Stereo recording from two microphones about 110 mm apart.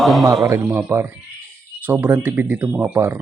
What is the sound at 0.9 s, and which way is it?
Speech, 30° right (ahead or behind).